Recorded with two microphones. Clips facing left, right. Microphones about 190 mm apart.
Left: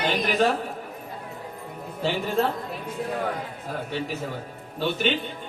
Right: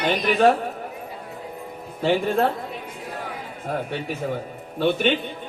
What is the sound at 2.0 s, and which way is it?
Speech, 55° right (ahead or behind).